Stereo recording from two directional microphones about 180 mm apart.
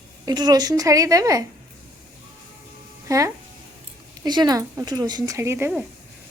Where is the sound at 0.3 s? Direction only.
20° right (ahead or behind).